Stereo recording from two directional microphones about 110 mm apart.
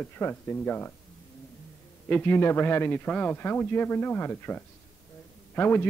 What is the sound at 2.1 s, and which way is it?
A man's voice, 20° left (ahead or behind).